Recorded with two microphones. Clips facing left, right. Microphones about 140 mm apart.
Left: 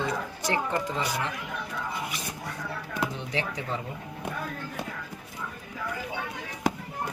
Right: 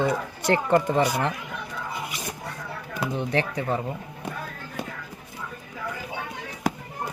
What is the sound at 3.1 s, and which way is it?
Speech, 55° right (ahead or behind).